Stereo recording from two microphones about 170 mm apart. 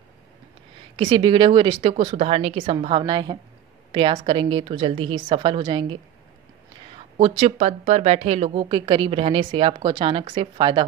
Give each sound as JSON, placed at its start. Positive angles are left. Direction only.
{"t": 0.9, "sound": "a woman's voice", "side_deg": -30}
{"t": 7.2, "sound": "a woman's voice", "side_deg": -35}